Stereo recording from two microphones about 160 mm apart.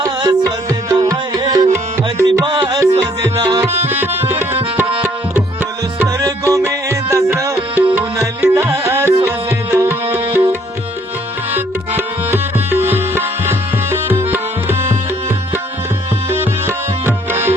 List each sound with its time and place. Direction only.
0.0 s music: 25° right (ahead or behind)
3.5 s tabla: 20° right (ahead or behind)
6.0 s music: 20° right (ahead or behind)
11.5 s tabla: 15° right (ahead or behind)
16.3 s tabla: 15° right (ahead or behind)